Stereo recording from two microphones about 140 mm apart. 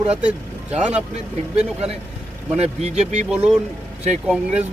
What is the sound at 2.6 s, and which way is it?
Speech, 55° right (ahead or behind).